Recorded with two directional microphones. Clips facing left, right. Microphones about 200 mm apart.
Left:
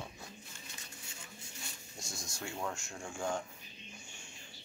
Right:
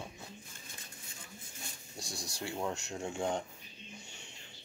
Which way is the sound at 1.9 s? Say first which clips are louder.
Right 4 dB; 35° right (ahead or behind).